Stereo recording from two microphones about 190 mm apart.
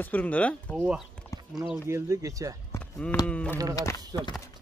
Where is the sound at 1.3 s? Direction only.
15° left (ahead or behind).